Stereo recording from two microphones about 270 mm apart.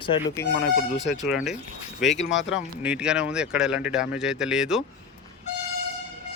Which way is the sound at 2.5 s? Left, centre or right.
Centre.